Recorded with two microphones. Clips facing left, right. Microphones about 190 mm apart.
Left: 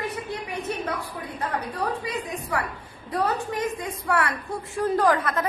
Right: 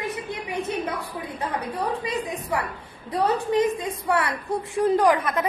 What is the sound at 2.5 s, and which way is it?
A woman's voice, 15° right (ahead or behind).